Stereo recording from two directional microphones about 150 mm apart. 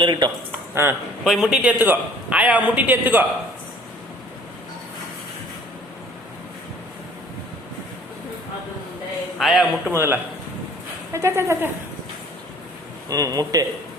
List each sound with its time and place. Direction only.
0.0 s a man's voice: 30° right (ahead or behind)
0.7 s speech: 15° right (ahead or behind)
1.2 s a man's voice: 5° right (ahead or behind)
9.4 s a man's voice: centre (ahead or behind)
9.9 s a man's voice: 15° right (ahead or behind)
13.1 s a man's voice: 25° right (ahead or behind)